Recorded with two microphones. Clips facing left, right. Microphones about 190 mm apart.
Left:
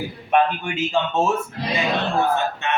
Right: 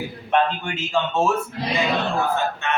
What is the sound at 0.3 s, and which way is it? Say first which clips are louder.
Speech: left 2 dB; 15° left (ahead or behind).